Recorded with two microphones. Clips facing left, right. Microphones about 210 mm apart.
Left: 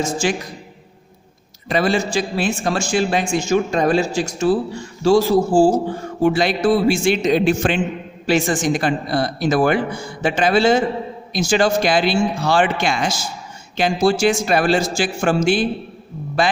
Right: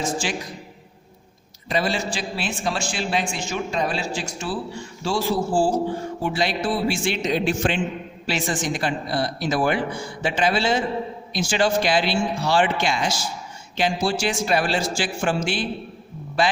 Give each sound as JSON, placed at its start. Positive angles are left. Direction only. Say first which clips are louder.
{"t": 0.0, "sound": "a man's voice", "louder": "left 6 dB", "side_deg": 45}
{"t": 1.6, "sound": "a man's voice", "louder": "left 5 dB", "side_deg": 55}